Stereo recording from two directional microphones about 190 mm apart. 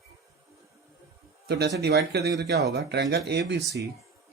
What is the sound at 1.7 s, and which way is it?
Speech, 60° right (ahead or behind).